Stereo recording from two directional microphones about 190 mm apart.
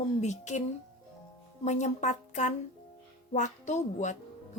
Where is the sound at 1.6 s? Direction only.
40° left (ahead or behind).